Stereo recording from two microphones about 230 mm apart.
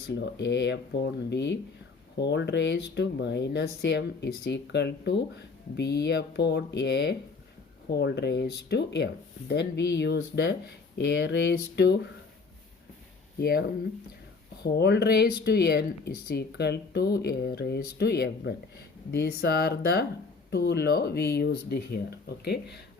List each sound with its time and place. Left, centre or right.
0.1 s speech: left
13.4 s speech: left